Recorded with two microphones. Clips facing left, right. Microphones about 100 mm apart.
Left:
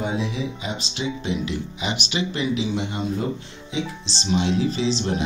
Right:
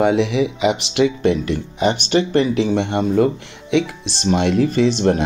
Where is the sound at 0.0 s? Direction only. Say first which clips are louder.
Right 10 dB; 75° right (ahead or behind).